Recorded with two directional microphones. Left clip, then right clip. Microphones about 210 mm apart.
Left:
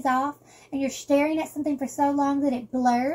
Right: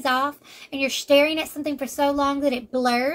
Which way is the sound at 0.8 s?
20° right (ahead or behind).